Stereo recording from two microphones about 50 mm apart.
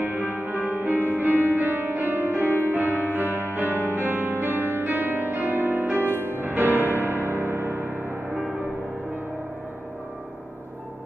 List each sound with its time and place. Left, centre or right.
0.0 s music: right
3.7 s music: left
4.0 s music: right